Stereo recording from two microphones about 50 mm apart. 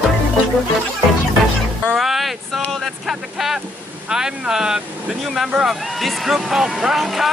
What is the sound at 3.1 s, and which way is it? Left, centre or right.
Speech, centre.